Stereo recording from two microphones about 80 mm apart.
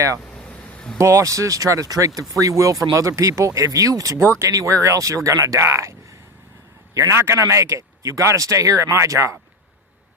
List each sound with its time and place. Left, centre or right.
0.3 s a sound: centre
0.9 s speech: right
7.1 s speech: right